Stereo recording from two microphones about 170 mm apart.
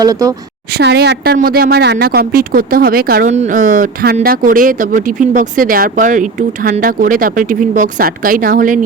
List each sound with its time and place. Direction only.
0.0 s a woman's voice: 20° right (ahead or behind)
0.8 s a woman's voice: 80° right; by 3.2 s 60° right (ahead or behind)
3.2 s speech: 45° right (ahead or behind)